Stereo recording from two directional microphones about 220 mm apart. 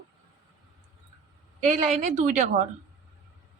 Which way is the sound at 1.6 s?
30° right (ahead or behind).